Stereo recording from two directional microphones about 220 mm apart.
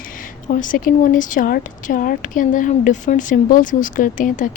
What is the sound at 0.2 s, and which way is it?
A woman's voice, 35° left (ahead or behind).